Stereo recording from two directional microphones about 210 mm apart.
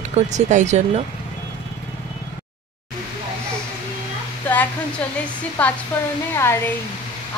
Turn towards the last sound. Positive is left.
turn(degrees=10)  # may be behind; listen again after turning